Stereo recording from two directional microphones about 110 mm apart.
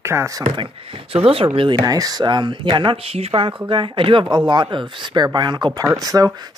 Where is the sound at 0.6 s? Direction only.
55° right (ahead or behind).